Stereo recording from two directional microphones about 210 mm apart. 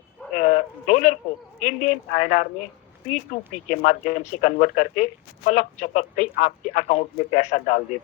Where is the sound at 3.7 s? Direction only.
35° left (ahead or behind).